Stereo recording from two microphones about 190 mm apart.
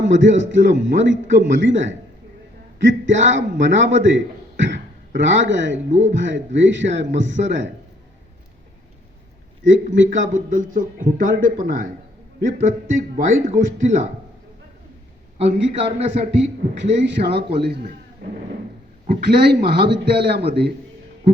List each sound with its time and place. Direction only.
0.0 s a man's voice: 75° right (ahead or behind)
9.6 s a man's voice: 75° right (ahead or behind)
10.3 s speech: 45° right (ahead or behind)
15.7 s speech: 35° right (ahead or behind)
16.4 s a man's voice: 70° right (ahead or behind)